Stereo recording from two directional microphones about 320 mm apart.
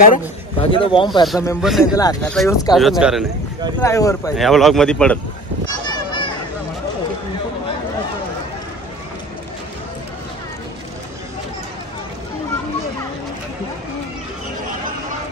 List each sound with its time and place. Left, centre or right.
0.6 s speech: centre
1.2 s speech: centre
2.0 s speech: centre
2.7 s speech: centre
3.8 s speech: centre
5.9 s a sound: centre